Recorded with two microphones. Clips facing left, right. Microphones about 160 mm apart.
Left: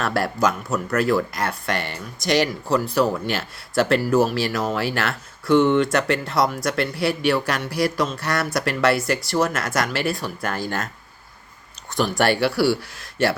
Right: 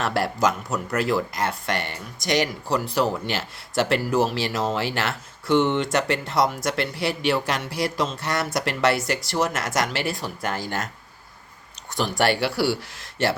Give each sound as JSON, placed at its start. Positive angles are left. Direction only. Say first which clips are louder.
{"t": 0.0, "sound": "speech", "louder": "left 1 dB", "side_deg": -20}
{"t": 11.9, "sound": "speech", "louder": "left 2 dB", "side_deg": -20}